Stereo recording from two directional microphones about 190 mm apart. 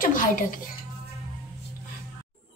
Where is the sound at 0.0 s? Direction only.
45° left (ahead or behind).